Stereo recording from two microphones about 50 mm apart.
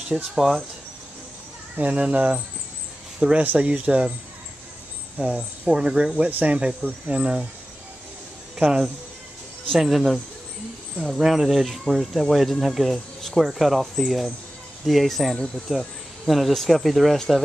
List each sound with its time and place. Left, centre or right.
0.1 s speech: centre
1.8 s speech: right
3.2 s speech: centre
5.2 s speech: centre
8.6 s speech: centre